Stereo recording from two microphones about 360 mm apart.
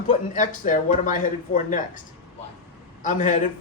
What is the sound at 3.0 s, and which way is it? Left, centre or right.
Speech, left.